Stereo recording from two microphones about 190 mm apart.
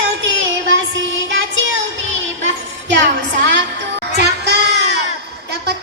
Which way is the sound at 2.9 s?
70° right (ahead or behind).